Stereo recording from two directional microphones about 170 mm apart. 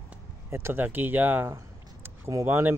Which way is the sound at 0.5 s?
15° right (ahead or behind).